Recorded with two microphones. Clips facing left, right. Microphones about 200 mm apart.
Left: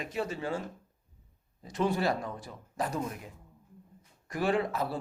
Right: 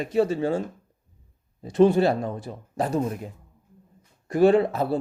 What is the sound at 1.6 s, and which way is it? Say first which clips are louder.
A man's voice: right 11 dB; 30° right (ahead or behind).